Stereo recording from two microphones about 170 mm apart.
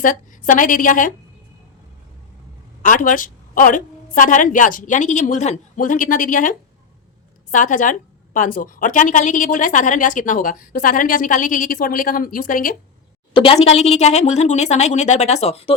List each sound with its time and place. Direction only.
0.0 s a woman's voice: 50° left (ahead or behind)
2.8 s a woman's voice: 50° left (ahead or behind)
13.3 s speech: 30° left (ahead or behind)